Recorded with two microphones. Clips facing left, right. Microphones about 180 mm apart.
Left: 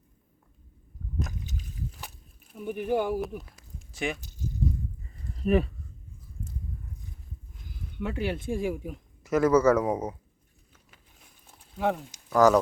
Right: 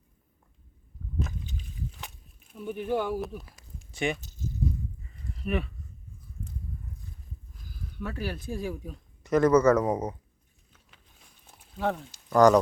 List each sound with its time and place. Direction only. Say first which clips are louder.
1.3 s a sound: left 1 dB; 5° left (ahead or behind)
2.6 s a man's voice: left 2 dB; 10° left (ahead or behind)
3.2 s speech: left 2 dB; centre (ahead or behind)
5.4 s speech: left 7 dB; 35° left (ahead or behind)
7.6 s speech: left 3 dB; 20° left (ahead or behind)
8.6 s a man's voice: left 4 dB; 15° left (ahead or behind)
11.8 s a man's voice: left 2 dB; 10° left (ahead or behind)